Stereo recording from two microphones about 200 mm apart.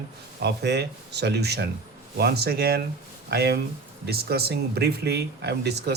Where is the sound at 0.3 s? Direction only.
55° right (ahead or behind).